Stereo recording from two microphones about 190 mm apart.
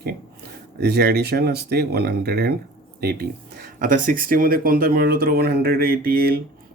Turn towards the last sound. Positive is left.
turn(degrees=-50)  # may be behind; listen again after turning